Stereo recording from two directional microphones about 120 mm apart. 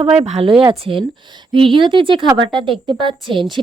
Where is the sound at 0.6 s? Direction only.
45° right (ahead or behind).